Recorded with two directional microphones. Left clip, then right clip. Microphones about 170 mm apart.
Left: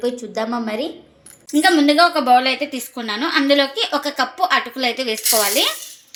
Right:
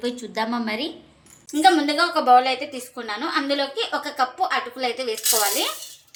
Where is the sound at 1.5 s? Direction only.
55° left (ahead or behind).